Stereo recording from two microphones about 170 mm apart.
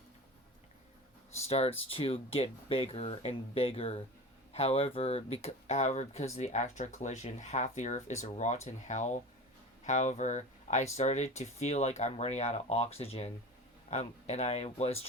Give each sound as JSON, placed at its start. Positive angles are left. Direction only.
{"t": 1.5, "sound": "speech", "side_deg": 35}